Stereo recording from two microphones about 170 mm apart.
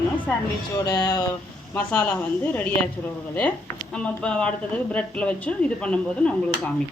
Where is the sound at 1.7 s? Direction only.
10° left (ahead or behind).